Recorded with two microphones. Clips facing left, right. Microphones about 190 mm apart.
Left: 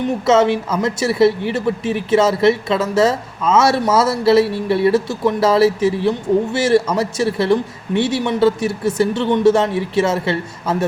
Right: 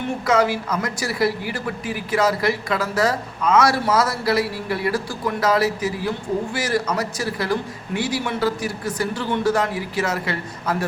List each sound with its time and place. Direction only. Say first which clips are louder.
0.3 s speech: left 5 dB; 25° left (ahead or behind)